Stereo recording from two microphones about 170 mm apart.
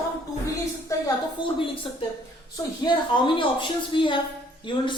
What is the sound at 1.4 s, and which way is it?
A woman's voice, 30° left (ahead or behind).